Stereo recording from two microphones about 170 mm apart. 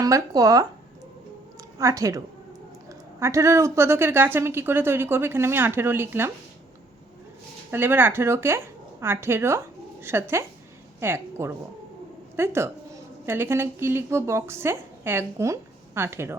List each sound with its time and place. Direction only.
0.0 s speech: 20° right (ahead or behind)
1.8 s speech: 20° right (ahead or behind)
7.7 s a woman's voice: 10° right (ahead or behind)